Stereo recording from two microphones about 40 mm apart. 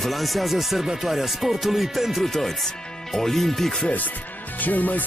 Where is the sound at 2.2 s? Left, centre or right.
Centre.